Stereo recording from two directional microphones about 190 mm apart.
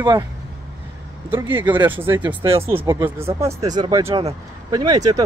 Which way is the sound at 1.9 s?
10° right (ahead or behind).